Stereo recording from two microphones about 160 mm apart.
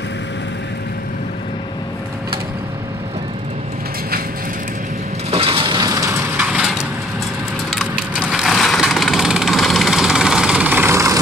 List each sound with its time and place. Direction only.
5.3 s crushing: 35° right (ahead or behind); by 6.9 s 5° right (ahead or behind)
7.7 s wood: 5° right (ahead or behind)